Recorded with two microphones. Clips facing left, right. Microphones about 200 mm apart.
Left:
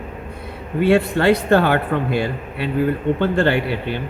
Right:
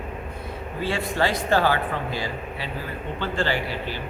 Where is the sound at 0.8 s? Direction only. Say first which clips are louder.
Left 10 dB; 60° left (ahead or behind).